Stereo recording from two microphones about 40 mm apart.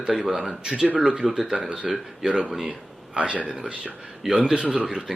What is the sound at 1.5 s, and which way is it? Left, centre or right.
Speech, right.